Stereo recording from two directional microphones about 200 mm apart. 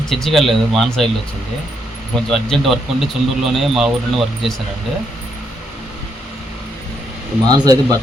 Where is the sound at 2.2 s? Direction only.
Centre (ahead or behind).